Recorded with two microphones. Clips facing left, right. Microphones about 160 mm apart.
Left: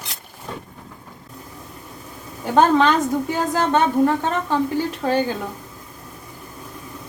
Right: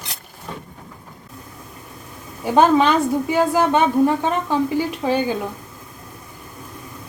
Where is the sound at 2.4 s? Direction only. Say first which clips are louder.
Right 1 dB; 10° right (ahead or behind).